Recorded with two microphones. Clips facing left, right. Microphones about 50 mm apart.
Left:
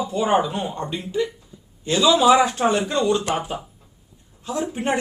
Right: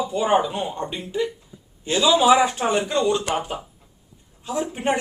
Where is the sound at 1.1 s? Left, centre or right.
Centre.